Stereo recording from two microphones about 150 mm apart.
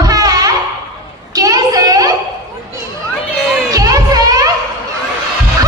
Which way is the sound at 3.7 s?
25° right (ahead or behind).